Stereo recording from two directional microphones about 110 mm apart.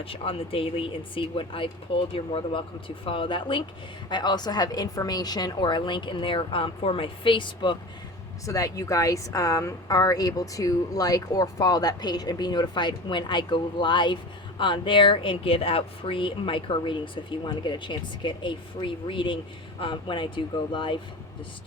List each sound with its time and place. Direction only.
0.0 s a woman's voice: 55° left (ahead or behind)
8.4 s a woman's voice: 30° left (ahead or behind); by 21.0 s 50° left (ahead or behind)